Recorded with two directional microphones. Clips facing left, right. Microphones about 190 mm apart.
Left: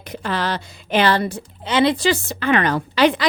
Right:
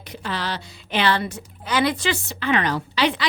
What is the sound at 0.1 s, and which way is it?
A woman's voice, 50° left (ahead or behind).